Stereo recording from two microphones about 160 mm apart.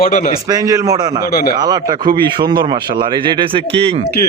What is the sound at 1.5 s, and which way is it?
A man's voice, 25° right (ahead or behind).